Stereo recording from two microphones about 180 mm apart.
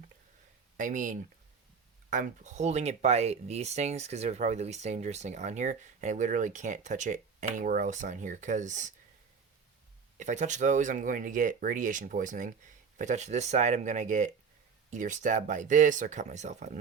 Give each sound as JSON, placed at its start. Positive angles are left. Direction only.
{"t": 0.8, "sound": "speech", "side_deg": -45}
{"t": 10.2, "sound": "speech", "side_deg": -40}